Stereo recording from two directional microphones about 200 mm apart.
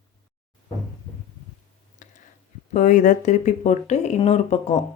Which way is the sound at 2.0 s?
40° left (ahead or behind).